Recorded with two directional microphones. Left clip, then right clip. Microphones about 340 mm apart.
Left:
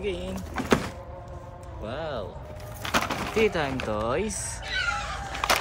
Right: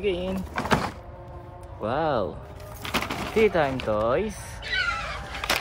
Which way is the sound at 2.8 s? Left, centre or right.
Centre.